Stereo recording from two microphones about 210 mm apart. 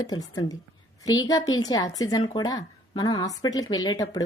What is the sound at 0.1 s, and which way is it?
Speech, 20° left (ahead or behind).